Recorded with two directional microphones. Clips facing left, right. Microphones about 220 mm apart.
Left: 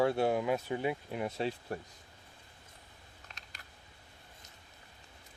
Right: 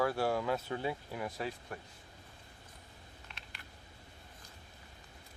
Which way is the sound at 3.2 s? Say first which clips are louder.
Left 1 dB; 40° left (ahead or behind).